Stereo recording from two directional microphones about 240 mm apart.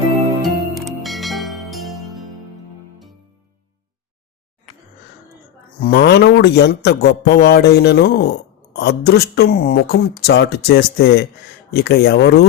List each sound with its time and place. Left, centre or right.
0.4 s music: centre
5.8 s speech: left